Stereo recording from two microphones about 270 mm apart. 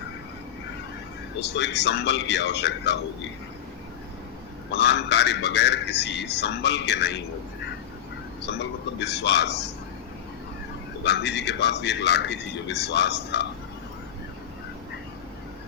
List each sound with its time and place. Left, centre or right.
1.4 s a man's voice: left
4.7 s a man's voice: left
8.4 s a man's voice: left
11.0 s a man's voice: left